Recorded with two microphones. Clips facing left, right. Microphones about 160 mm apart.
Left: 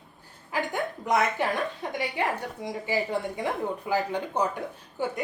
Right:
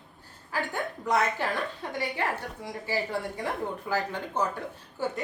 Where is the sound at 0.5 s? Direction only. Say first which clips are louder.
Left 2 dB; 15° left (ahead or behind).